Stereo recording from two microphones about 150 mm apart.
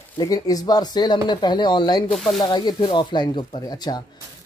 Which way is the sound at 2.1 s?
Centre (ahead or behind).